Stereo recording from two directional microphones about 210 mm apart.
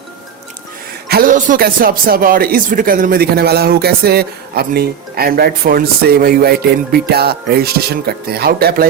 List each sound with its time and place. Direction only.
1.0 s speech: 45° right (ahead or behind)